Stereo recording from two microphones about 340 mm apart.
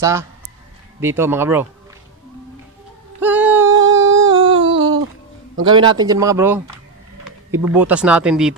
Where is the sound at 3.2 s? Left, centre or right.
Centre.